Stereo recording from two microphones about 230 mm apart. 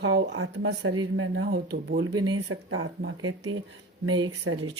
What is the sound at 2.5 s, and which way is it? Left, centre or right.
Speech, right.